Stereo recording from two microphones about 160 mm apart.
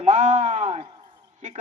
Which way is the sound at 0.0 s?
55° right (ahead or behind).